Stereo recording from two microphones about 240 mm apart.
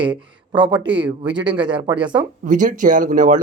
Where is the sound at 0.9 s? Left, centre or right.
Centre.